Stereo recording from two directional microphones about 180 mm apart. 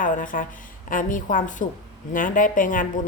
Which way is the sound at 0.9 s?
50° left (ahead or behind).